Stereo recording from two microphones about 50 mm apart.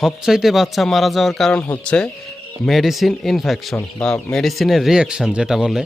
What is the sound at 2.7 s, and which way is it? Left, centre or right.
Speech, centre.